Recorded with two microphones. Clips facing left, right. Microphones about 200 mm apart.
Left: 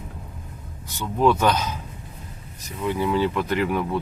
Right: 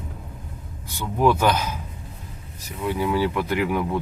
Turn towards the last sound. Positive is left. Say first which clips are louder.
# even
turn(degrees=-15)  # may be behind; listen again after turning